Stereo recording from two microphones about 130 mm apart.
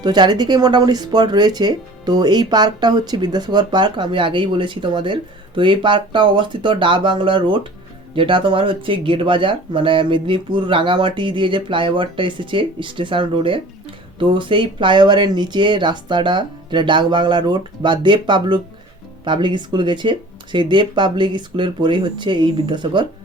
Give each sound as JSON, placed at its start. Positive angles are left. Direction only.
{"t": 0.0, "sound": "speech", "side_deg": -30}